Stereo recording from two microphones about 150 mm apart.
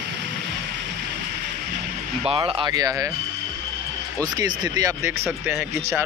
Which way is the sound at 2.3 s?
35° right (ahead or behind).